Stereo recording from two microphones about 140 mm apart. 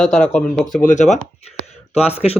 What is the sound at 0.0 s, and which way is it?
Speech, 5° left (ahead or behind).